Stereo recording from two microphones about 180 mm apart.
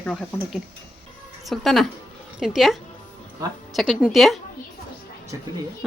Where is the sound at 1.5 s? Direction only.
Centre (ahead or behind).